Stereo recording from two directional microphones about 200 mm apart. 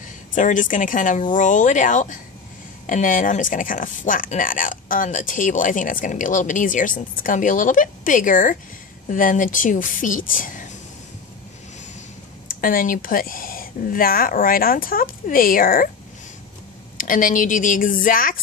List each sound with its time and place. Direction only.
0.0 s speech: 40° left (ahead or behind)
12.4 s speech: 45° left (ahead or behind)
16.9 s speech: 40° left (ahead or behind)